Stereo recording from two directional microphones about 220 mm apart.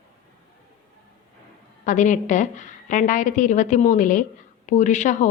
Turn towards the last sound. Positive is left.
turn(degrees=35)  # may be behind; listen again after turning